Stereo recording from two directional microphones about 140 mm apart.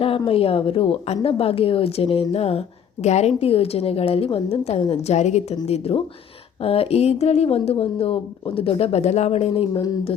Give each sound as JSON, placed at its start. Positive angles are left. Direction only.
{"t": 0.3, "sound": "a woman's voice", "side_deg": 40}
{"t": 9.5, "sound": "speech", "side_deg": 40}